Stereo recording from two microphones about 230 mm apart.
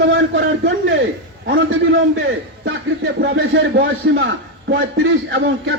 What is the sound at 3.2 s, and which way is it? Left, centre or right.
A man's voice, right.